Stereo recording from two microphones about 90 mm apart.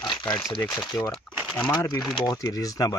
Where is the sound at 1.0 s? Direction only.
20° left (ahead or behind).